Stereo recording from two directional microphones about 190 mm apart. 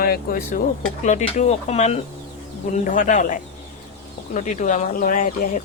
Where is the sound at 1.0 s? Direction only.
40° left (ahead or behind).